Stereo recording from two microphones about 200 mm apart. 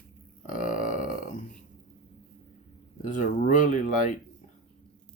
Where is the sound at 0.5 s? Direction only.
40° left (ahead or behind).